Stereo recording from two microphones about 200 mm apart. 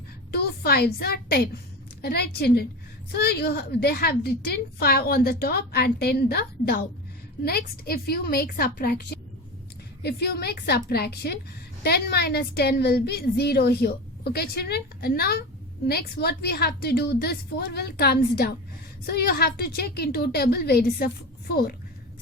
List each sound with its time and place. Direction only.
0.3 s a woman's voice: 50° left (ahead or behind)